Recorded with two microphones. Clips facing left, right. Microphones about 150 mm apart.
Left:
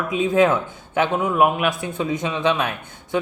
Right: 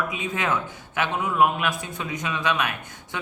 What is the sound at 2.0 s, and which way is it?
Speech, 30° left (ahead or behind).